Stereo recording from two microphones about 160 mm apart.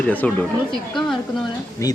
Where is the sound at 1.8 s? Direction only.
20° left (ahead or behind).